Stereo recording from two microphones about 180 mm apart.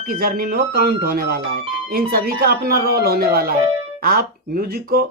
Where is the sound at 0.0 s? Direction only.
55° right (ahead or behind).